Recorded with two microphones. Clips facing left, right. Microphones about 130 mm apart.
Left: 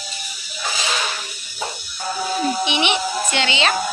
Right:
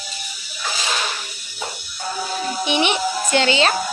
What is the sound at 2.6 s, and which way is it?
Speech, 40° right (ahead or behind).